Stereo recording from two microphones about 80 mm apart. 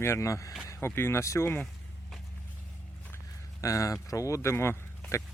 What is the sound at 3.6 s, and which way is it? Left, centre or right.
Speech, left.